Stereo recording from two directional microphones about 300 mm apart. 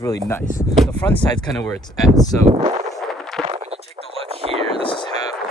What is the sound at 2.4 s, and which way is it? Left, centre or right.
Speech, centre.